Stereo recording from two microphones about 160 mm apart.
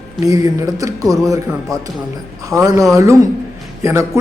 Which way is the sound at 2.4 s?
20° right (ahead or behind).